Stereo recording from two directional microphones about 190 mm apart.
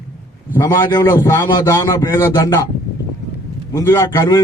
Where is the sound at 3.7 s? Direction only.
15° left (ahead or behind).